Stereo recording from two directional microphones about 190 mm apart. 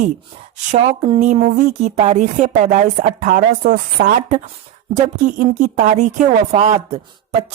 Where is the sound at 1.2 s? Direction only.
40° right (ahead or behind).